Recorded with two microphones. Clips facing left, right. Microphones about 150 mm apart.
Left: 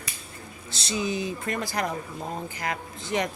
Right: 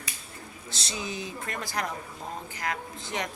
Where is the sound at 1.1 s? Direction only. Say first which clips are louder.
Left 6 dB; 5° left (ahead or behind).